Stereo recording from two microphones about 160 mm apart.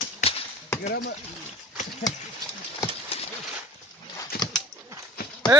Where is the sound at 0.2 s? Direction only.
45° left (ahead or behind).